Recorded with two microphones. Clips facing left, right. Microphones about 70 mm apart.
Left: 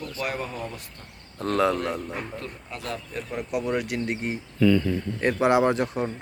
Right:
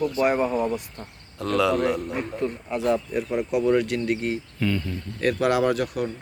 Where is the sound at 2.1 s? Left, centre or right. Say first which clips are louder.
Right 7 dB; centre.